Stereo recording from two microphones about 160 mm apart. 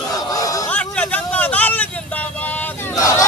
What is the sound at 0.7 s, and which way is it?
Vehicle, 10° left (ahead or behind).